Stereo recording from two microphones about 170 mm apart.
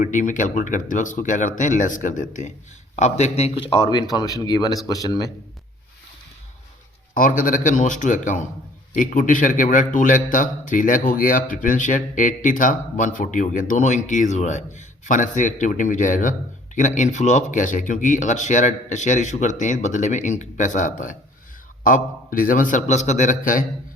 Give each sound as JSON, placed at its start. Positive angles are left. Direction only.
{"t": 0.0, "sound": "speech", "side_deg": 50}
{"t": 7.1, "sound": "speech", "side_deg": 55}